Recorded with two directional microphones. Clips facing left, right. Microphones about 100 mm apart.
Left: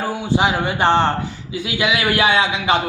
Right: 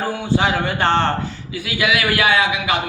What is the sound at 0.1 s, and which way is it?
A man's voice, 15° left (ahead or behind).